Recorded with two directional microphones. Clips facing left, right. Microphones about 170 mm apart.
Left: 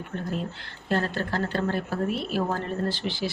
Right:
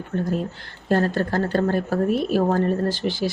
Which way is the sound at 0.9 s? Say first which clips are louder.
Right 6 dB; 40° right (ahead or behind).